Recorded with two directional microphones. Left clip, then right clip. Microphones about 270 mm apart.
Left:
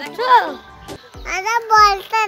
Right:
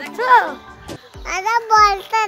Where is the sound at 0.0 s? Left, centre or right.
Centre.